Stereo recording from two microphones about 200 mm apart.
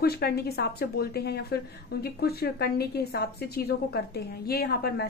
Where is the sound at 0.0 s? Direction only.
50° left (ahead or behind).